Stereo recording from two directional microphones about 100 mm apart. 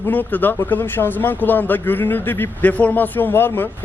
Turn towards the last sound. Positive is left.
turn(degrees=20)  # may be behind; listen again after turning